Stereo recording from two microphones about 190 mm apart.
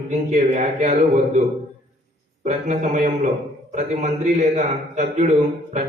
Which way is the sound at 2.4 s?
35° right (ahead or behind).